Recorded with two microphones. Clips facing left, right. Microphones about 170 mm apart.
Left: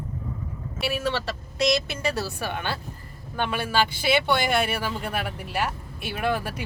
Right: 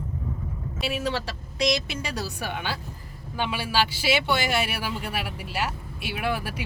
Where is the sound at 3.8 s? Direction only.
55° left (ahead or behind).